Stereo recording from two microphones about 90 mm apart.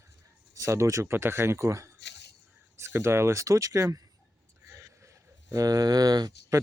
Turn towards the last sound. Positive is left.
turn(degrees=-50)  # may be behind; listen again after turning